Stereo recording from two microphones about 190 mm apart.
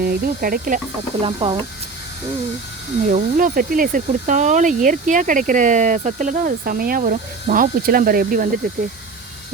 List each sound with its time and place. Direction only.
0.0 s speech: 50° right (ahead or behind)
1.2 s speech: 25° right (ahead or behind)
3.1 s speech: 45° right (ahead or behind)